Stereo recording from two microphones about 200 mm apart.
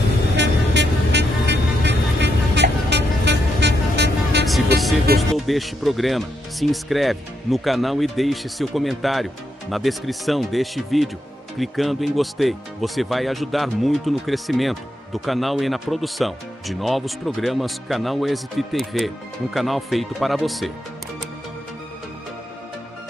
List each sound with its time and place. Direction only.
0.4 s music: 60° right (ahead or behind)
4.7 s music: centre (ahead or behind)
5.1 s speech: centre (ahead or behind)